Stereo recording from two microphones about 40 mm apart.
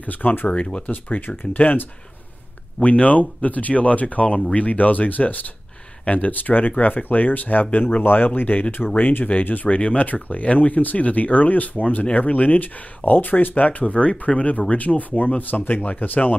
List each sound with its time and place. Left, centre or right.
0.0 s speech: left
2.8 s speech: left
9.7 s speech: left